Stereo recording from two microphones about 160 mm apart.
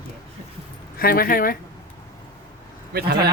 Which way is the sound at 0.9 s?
70° left (ahead or behind).